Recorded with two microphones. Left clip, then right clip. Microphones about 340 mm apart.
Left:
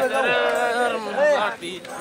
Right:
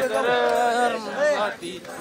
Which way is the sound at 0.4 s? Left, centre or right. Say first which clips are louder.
Even; centre.